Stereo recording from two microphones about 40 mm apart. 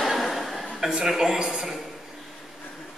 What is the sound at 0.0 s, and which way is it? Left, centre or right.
Chuckle, centre.